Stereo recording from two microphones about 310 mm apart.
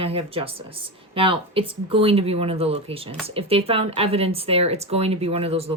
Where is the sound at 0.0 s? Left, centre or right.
Centre.